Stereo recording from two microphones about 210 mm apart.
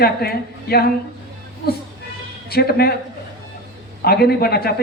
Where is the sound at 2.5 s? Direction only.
50° left (ahead or behind).